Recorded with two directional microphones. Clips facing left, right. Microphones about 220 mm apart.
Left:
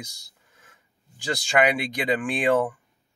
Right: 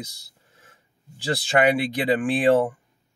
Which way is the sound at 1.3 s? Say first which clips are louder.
Right 2 dB; 30° right (ahead or behind).